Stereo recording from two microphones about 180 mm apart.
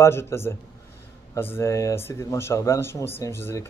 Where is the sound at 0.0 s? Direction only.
15° left (ahead or behind).